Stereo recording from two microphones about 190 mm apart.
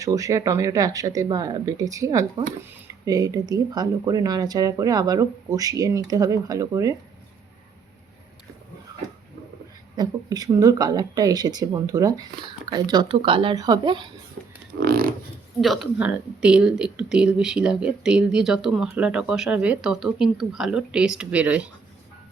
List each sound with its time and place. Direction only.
0.0 s speech: 15° right (ahead or behind)
9.9 s speech: 20° right (ahead or behind)
14.4 s a sound: 45° right (ahead or behind)
15.6 s speech: centre (ahead or behind)